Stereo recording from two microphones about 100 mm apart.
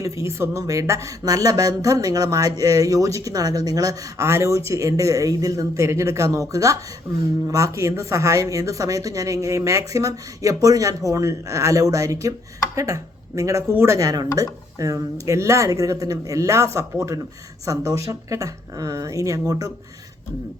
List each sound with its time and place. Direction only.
0.0 s speech: 30° right (ahead or behind)